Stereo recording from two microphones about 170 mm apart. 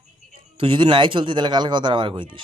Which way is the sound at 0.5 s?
30° right (ahead or behind).